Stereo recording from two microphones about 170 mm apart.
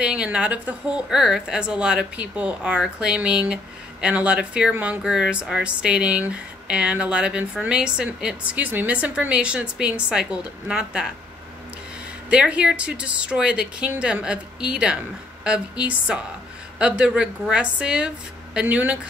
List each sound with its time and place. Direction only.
0.0 s speech: 5° right (ahead or behind)
12.3 s speech: 5° right (ahead or behind)